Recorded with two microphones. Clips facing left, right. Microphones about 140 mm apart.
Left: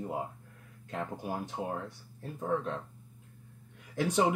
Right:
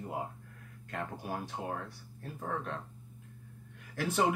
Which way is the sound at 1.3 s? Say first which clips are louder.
Left 1 dB; 20° left (ahead or behind).